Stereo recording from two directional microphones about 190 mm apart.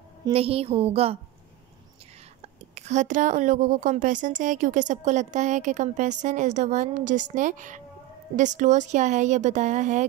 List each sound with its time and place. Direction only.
0.3 s a woman's voice: 30° right (ahead or behind)
2.7 s a woman's voice: 40° right (ahead or behind)